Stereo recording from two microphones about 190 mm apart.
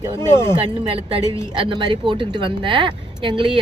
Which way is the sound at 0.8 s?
30° right (ahead or behind).